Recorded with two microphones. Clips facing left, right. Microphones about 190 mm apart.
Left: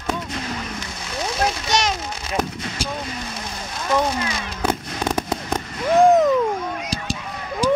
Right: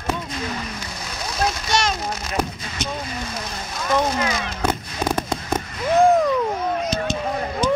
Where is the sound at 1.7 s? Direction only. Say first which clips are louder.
Right 1 dB; 15° left (ahead or behind).